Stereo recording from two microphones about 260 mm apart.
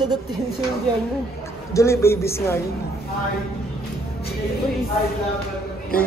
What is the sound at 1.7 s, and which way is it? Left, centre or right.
Speech, centre.